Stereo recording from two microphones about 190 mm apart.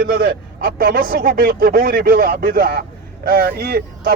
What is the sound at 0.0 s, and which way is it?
Speech, 55° right (ahead or behind).